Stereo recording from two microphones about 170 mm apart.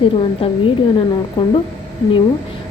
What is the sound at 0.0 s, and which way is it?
Speech, 30° left (ahead or behind).